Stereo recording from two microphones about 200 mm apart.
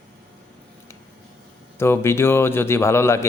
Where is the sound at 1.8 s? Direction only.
10° left (ahead or behind).